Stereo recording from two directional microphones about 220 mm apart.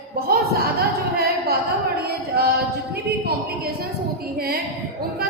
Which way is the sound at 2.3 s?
45° right (ahead or behind).